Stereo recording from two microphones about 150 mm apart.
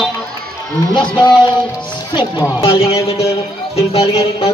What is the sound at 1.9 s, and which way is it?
Speech, 30° left (ahead or behind).